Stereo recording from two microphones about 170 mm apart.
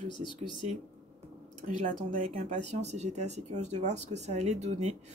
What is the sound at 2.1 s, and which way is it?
Speech, 50° right (ahead or behind).